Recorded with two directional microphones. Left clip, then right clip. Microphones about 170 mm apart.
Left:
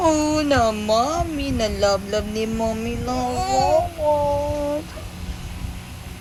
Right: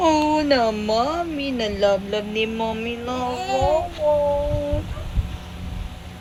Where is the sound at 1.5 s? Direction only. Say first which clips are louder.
Even; 5° right (ahead or behind).